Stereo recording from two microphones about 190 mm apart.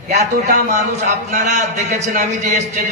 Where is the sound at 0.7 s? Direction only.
40° right (ahead or behind).